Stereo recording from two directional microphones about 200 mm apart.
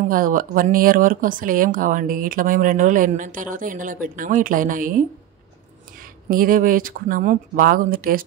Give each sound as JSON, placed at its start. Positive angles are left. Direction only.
{"t": 0.1, "sound": "speech", "side_deg": -45}
{"t": 6.2, "sound": "speech", "side_deg": -45}